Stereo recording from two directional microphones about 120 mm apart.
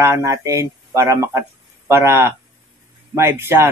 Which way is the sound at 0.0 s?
25° right (ahead or behind).